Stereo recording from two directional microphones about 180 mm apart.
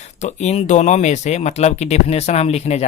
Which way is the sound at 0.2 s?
40° left (ahead or behind).